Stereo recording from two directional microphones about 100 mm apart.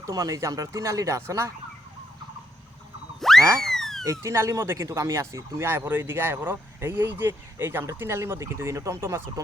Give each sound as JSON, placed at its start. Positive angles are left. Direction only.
{"t": 0.0, "sound": "speech", "side_deg": -35}
{"t": 3.2, "sound": "frog", "side_deg": 5}
{"t": 4.0, "sound": "speech", "side_deg": -30}